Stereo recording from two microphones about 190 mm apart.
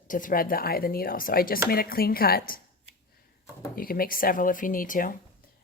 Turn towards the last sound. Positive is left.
turn(degrees=45)  # may be behind; listen again after turning